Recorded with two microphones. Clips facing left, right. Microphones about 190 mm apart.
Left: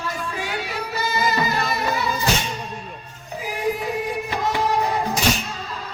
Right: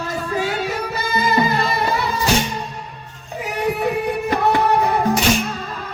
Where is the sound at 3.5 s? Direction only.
70° right (ahead or behind).